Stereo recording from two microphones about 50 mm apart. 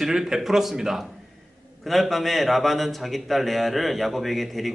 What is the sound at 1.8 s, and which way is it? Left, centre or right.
A man's voice, centre.